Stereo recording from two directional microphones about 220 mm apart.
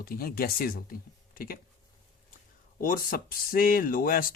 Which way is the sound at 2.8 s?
40° left (ahead or behind).